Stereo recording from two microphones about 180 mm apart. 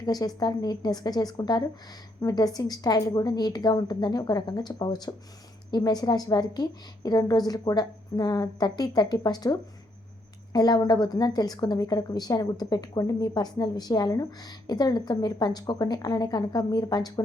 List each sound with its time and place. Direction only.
0.0 s a woman's voice: 20° left (ahead or behind)